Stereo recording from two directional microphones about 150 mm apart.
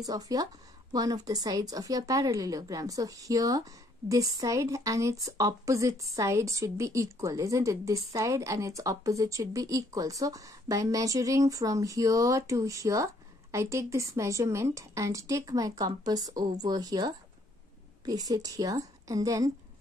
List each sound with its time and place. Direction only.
0.0 s a woman's voice: 25° right (ahead or behind)